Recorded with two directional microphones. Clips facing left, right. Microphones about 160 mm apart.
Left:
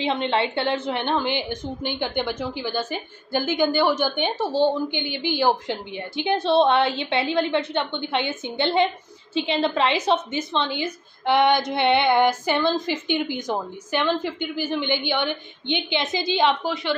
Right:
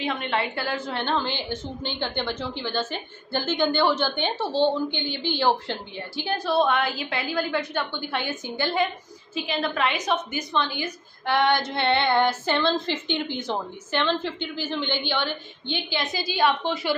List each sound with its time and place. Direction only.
0.0 s a woman's voice: 30° left (ahead or behind)
16.6 s a woman's voice: centre (ahead or behind)